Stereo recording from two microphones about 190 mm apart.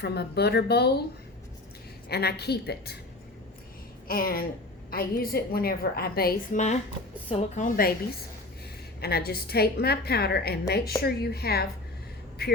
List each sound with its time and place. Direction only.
0.0 s a woman's voice: 60° left (ahead or behind)
2.0 s a woman's voice: 55° left (ahead or behind)
4.1 s a woman's voice: 50° left (ahead or behind)
9.0 s a woman's voice: 55° left (ahead or behind)